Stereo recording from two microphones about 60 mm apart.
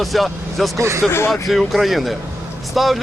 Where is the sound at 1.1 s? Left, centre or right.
Left.